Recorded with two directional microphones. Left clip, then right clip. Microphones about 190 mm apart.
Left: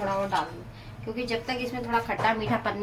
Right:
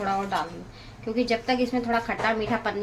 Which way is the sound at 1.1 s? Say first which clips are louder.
Right 6 dB; 40° right (ahead or behind).